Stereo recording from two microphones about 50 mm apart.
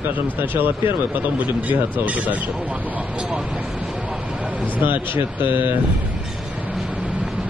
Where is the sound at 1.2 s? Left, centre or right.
Right.